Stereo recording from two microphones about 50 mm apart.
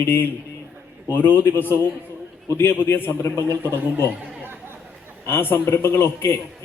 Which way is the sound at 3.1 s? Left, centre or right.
Left.